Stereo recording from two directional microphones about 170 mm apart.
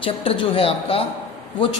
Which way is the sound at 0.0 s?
30° left (ahead or behind).